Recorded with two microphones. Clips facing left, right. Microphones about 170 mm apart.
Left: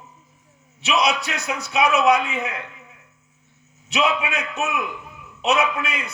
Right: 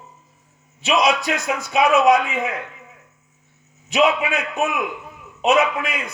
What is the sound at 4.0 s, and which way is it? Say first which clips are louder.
A man's voice: right 4 dB; 55° right (ahead or behind).